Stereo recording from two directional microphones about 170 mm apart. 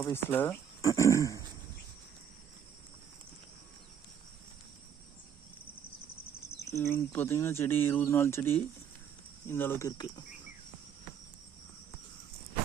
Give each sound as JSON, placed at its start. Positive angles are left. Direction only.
{"t": 0.0, "sound": "speech", "side_deg": 15}
{"t": 6.7, "sound": "speech", "side_deg": 15}